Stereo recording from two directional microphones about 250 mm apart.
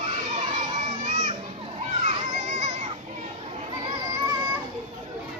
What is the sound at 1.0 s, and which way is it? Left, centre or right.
Children playing, right.